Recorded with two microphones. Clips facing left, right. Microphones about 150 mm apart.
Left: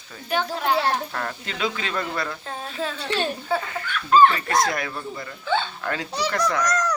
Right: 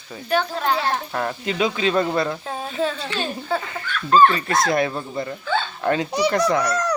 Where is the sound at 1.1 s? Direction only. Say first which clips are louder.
Right 7 dB; 15° right (ahead or behind).